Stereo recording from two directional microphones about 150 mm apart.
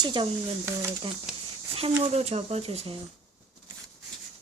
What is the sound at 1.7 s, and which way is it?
Speech, 45° right (ahead or behind).